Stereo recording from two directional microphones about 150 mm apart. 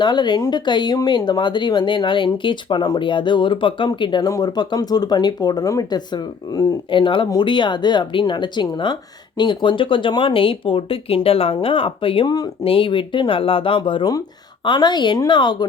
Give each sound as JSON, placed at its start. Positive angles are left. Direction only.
{"t": 0.0, "sound": "speech", "side_deg": 30}